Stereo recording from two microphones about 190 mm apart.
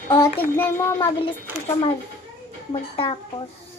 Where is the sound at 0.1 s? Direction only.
15° left (ahead or behind).